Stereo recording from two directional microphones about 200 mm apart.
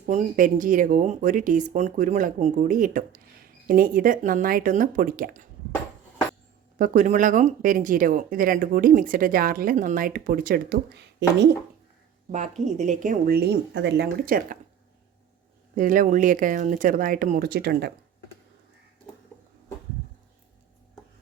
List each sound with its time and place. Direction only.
0.0 s speech: 40° right (ahead or behind)
6.7 s speech: 40° right (ahead or behind); by 11.4 s 60° right (ahead or behind)
12.3 s speech: 40° right (ahead or behind)
15.7 s speech: 40° right (ahead or behind)